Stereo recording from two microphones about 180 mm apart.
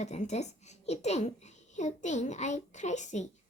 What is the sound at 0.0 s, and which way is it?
A woman's voice, 40° left (ahead or behind).